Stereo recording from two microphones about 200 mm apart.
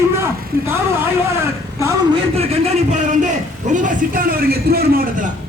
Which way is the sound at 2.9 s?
35° right (ahead or behind).